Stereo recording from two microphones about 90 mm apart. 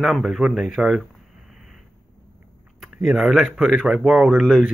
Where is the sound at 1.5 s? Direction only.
5° right (ahead or behind).